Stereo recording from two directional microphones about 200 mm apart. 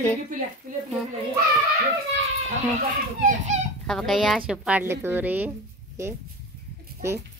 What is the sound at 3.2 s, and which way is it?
Speech, 40° right (ahead or behind).